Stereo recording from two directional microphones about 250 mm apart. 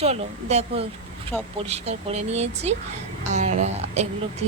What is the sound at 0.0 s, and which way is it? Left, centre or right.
Speech, right.